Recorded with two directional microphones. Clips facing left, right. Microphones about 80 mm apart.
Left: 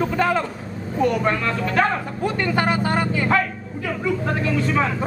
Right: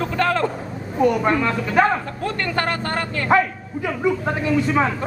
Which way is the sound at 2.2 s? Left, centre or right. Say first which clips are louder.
Left 2 dB; centre.